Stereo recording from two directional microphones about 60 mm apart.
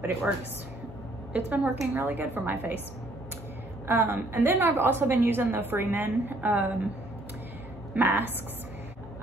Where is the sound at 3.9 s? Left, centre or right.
Right.